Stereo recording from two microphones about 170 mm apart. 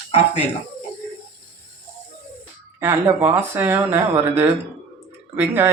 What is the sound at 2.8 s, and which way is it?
Speech, 15° right (ahead or behind).